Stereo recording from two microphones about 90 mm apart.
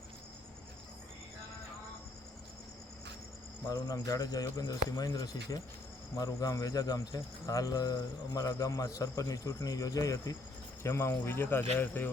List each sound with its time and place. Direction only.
3.7 s speech: 40° left (ahead or behind)
6.1 s cricket: 40° left (ahead or behind)
10.8 s speech: 30° left (ahead or behind)